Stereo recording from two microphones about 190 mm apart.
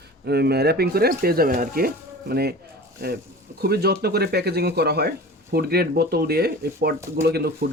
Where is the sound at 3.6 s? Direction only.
55° right (ahead or behind).